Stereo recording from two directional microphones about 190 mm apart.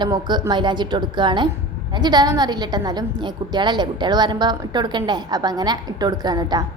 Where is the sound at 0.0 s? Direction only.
25° right (ahead or behind).